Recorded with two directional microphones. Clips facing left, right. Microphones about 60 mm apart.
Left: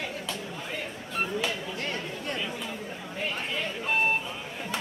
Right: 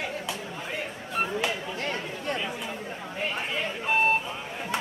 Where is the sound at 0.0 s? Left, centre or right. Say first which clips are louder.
Right 2 dB; centre.